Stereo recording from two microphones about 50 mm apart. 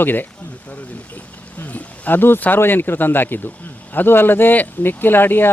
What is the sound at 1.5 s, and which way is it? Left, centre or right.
Speech, left.